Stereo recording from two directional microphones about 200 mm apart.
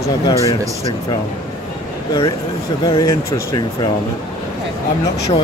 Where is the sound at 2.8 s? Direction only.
20° left (ahead or behind).